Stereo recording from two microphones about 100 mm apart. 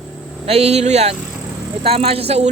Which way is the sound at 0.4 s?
90° right.